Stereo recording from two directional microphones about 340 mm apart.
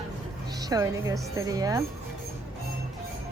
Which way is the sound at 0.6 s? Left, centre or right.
Centre.